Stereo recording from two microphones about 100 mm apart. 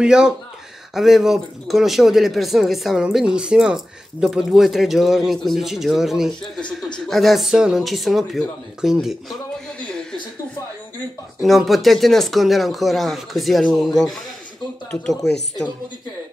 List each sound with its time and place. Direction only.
0.0 s speech: 5° right (ahead or behind)
11.4 s speech: centre (ahead or behind)